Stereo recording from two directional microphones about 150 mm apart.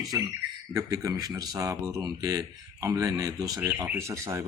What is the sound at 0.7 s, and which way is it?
Speech, 20° right (ahead or behind).